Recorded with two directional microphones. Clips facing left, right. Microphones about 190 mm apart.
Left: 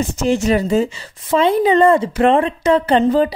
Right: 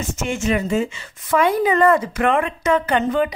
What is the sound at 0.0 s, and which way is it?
Speech, 35° left (ahead or behind).